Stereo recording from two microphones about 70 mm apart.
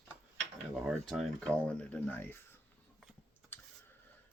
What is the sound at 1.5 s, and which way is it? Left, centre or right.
Speech, centre.